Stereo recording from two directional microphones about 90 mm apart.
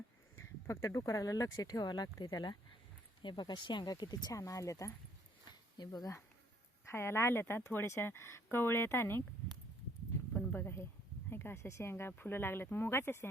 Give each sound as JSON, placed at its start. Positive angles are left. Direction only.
{"t": 0.3, "sound": "speech", "side_deg": 30}
{"t": 5.7, "sound": "speech", "side_deg": 50}
{"t": 6.8, "sound": "speech", "side_deg": 30}
{"t": 10.3, "sound": "speech", "side_deg": 20}